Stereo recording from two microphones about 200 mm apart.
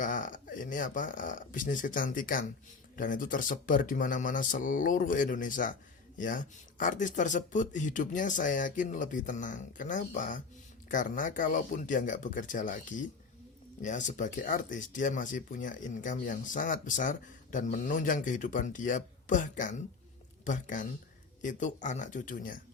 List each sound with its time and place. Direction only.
0.0 s speech: 40° left (ahead or behind)